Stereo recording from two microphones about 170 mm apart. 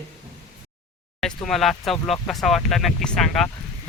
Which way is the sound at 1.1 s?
5° left (ahead or behind).